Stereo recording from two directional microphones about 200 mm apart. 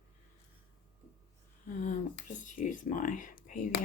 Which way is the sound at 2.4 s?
40° left (ahead or behind).